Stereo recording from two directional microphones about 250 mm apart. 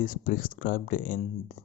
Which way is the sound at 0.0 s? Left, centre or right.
Left.